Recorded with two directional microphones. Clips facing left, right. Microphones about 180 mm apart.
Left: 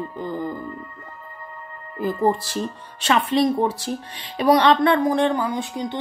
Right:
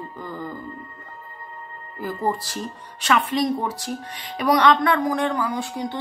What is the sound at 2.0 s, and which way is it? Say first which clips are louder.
Speech: left 5 dB; 20° left (ahead or behind).